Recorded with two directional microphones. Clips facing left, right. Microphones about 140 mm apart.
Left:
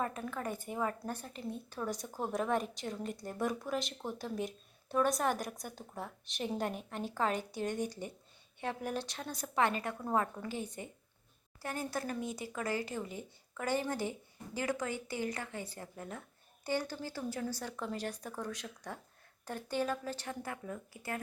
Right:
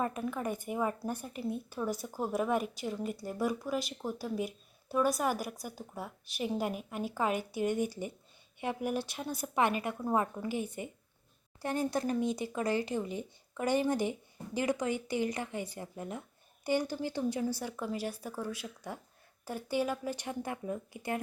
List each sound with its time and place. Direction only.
0.0 s a woman's voice: 15° right (ahead or behind)